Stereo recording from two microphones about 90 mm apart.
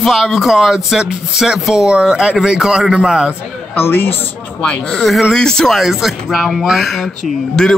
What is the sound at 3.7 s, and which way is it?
Speech, 25° left (ahead or behind).